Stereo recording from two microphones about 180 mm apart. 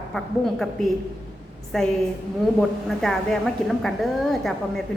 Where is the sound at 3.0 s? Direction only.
Centre (ahead or behind).